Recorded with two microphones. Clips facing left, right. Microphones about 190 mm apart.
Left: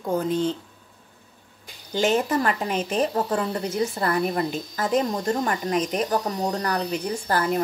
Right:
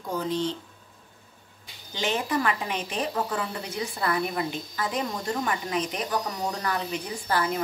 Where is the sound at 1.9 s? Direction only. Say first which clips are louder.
Left 6 dB; 45° left (ahead or behind).